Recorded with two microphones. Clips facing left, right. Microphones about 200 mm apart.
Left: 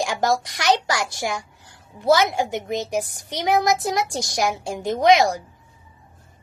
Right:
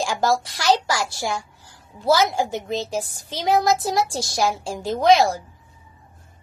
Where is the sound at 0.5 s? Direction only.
60° left (ahead or behind).